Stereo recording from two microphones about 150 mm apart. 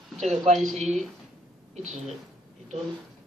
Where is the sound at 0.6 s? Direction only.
Centre (ahead or behind).